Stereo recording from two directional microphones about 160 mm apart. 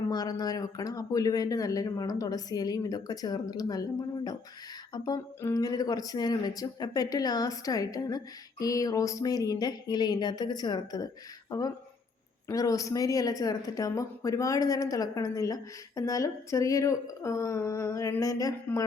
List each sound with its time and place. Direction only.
0.1 s speech: 25° left (ahead or behind)